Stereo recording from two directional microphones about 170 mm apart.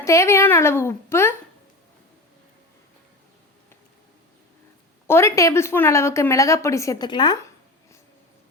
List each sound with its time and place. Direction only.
0.0 s speech: 15° left (ahead or behind)
5.0 s speech: 15° left (ahead or behind)